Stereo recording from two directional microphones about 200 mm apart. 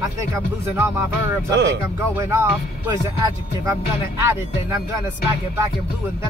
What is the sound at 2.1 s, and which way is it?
Music, 10° right (ahead or behind).